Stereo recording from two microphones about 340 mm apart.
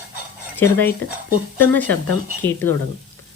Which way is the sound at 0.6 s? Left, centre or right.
Centre.